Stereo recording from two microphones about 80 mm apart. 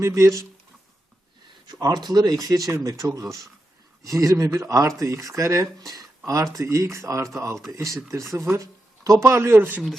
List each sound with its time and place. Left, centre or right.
0.0 s speech: right
1.7 s speech: right
9.0 s speech: right